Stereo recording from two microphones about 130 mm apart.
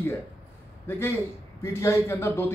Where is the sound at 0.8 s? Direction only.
20° left (ahead or behind).